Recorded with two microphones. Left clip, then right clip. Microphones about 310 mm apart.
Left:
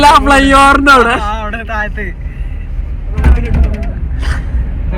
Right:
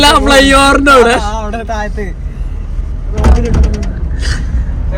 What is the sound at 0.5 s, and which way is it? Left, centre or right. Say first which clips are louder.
Speech: left 1 dB; centre.